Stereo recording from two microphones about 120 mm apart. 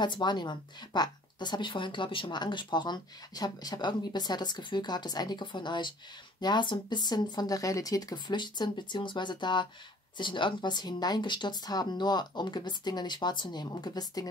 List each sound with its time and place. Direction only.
0.0 s a woman's voice: 40° left (ahead or behind)